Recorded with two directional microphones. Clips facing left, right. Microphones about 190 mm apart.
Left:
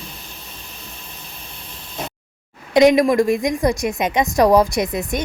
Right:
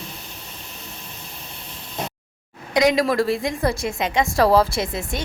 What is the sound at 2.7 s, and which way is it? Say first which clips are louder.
A woman's voice: left 5 dB; 20° left (ahead or behind).